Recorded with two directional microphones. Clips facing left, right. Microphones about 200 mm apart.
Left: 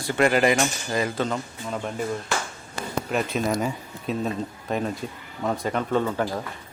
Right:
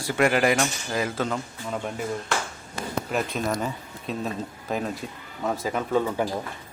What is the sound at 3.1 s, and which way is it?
Speech, centre (ahead or behind).